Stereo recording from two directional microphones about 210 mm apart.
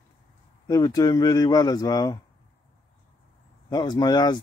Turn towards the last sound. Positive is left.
turn(degrees=20)  # may be behind; listen again after turning